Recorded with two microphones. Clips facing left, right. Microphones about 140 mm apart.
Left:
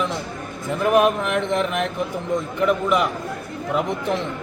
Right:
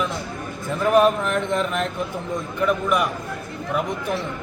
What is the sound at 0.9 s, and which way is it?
Speech, 10° left (ahead or behind).